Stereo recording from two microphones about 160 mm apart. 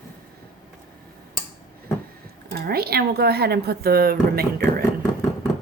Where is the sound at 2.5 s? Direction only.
75° right (ahead or behind).